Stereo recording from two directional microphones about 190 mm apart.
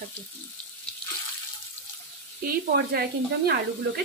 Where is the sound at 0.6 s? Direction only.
5° left (ahead or behind).